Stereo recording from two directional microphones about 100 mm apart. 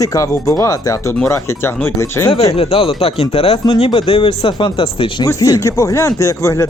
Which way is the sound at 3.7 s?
70° left (ahead or behind).